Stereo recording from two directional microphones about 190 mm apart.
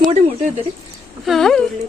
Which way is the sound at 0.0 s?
40° right (ahead or behind).